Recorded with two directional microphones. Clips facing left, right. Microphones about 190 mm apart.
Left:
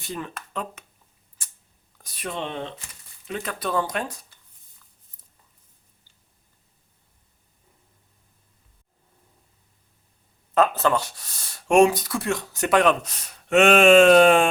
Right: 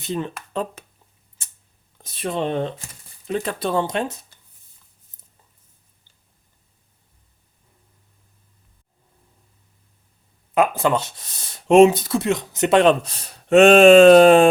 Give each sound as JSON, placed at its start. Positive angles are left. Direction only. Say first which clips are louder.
{"t": 0.0, "sound": "speech", "louder": "right 7 dB", "side_deg": -25}
{"t": 1.4, "sound": "a sound", "louder": "even", "side_deg": -25}
{"t": 2.0, "sound": "speech", "louder": "right 7 dB", "side_deg": -25}
{"t": 10.5, "sound": "speech", "louder": "right 2 dB", "side_deg": -10}